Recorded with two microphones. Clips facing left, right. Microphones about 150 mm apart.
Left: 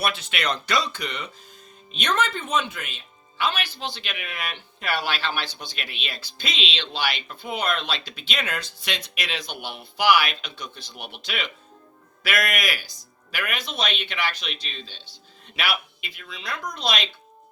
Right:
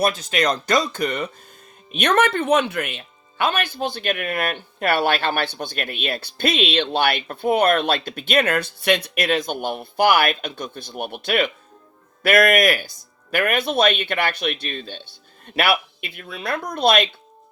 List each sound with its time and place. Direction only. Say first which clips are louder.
0.0 s speech: right 7 dB; 40° right (ahead or behind)
1.9 s speech: right 7 dB; 60° right (ahead or behind)